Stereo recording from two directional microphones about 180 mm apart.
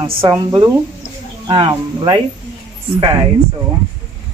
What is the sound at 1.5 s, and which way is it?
Speech, 25° right (ahead or behind).